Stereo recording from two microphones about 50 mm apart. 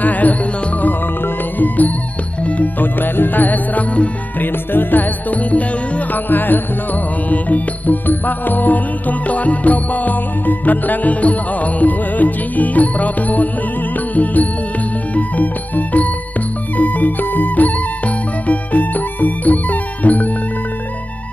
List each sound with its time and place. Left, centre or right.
0.0 s music: left
2.4 s music: left
6.2 s music: left